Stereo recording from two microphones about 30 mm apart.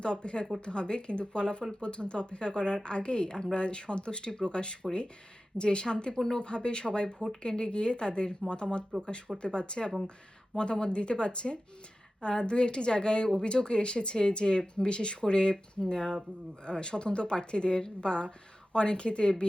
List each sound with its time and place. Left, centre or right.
0.0 s a woman's voice: left
6.1 s speech: centre
6.4 s a woman's voice: left